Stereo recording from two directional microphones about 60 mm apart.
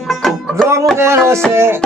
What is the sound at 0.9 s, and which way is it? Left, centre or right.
Music, right.